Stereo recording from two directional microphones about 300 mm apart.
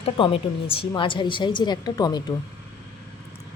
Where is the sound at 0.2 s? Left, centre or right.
Centre.